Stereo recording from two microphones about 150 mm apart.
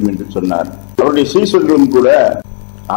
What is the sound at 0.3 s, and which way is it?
A man's voice, 15° left (ahead or behind).